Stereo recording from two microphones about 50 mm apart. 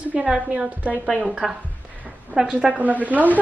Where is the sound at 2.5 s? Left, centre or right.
Right.